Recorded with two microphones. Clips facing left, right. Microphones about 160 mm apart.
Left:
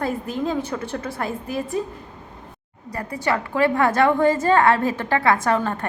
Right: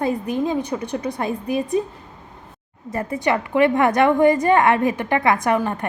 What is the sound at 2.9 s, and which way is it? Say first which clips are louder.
A woman's voice: right 3 dB; 20° right (ahead or behind).